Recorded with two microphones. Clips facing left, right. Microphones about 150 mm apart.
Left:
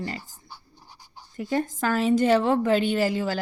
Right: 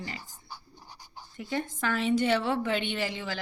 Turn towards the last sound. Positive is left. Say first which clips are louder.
# left 9 dB
turn(degrees=40)  # may be behind; listen again after turning